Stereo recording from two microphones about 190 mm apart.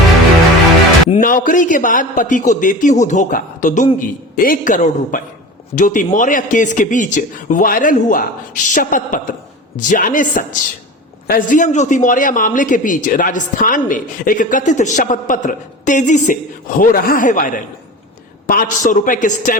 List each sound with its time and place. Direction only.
1.2 s speech: 45° left (ahead or behind)